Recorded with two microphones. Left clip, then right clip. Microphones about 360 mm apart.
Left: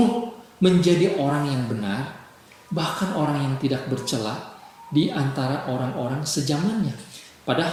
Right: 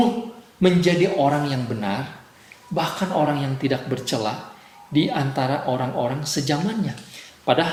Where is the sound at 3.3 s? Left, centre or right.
Centre.